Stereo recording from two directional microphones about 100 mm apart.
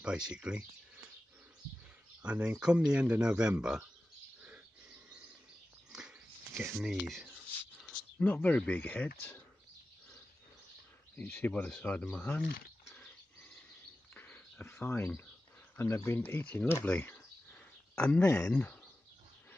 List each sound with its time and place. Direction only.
0.0 s speech: 10° right (ahead or behind)
2.2 s speech: 10° right (ahead or behind)
5.9 s a sound: 5° right (ahead or behind)
6.8 s speech: 5° right (ahead or behind)
7.9 s speech: 15° left (ahead or behind)
11.3 s speech: 15° left (ahead or behind)
14.1 s a sound: 15° left (ahead or behind)
15.8 s speech: 30° left (ahead or behind); by 18.2 s 10° left (ahead or behind)
18.2 s speech: 30° left (ahead or behind)
18.5 s speech: 15° left (ahead or behind)